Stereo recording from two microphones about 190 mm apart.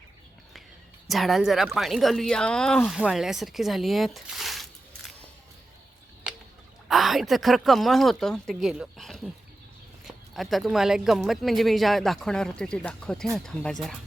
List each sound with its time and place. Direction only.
1.0 s speech: centre (ahead or behind)
6.8 s speech: centre (ahead or behind)